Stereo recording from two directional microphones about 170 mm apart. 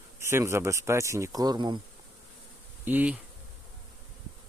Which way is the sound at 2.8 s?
10° right (ahead or behind).